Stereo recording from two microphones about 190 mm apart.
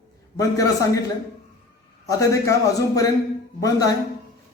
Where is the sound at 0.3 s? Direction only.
20° left (ahead or behind).